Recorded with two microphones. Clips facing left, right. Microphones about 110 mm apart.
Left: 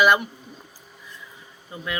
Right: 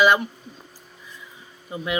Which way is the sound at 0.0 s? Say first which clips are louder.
Right 1 dB; 5° left (ahead or behind).